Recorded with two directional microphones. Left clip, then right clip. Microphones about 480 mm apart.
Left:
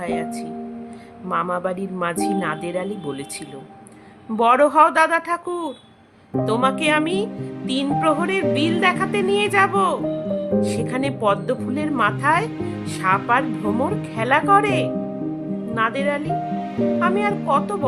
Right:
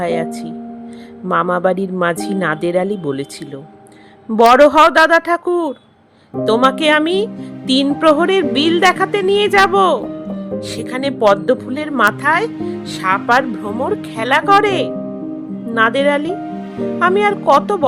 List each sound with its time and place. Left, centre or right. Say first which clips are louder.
0.0 s a woman's voice: right 7 dB; centre
4.4 s a woman's voice: right 6 dB; centre